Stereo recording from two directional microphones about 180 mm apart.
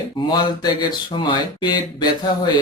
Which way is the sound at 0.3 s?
25° left (ahead or behind).